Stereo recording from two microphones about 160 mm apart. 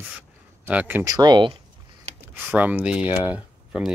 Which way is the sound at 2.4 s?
10° right (ahead or behind).